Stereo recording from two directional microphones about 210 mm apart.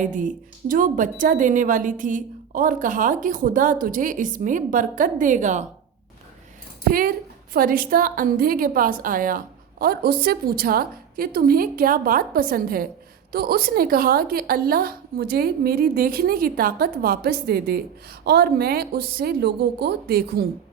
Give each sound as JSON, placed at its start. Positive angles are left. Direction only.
{"t": 0.0, "sound": "a woman's voice", "side_deg": -40}
{"t": 7.5, "sound": "a woman's voice", "side_deg": -45}